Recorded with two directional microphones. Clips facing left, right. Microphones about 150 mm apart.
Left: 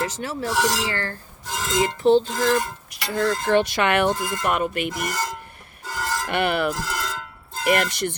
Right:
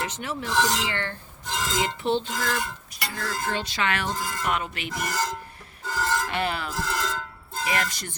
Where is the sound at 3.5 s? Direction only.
60° left (ahead or behind).